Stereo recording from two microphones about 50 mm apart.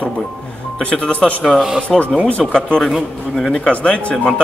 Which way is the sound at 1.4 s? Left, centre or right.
Centre.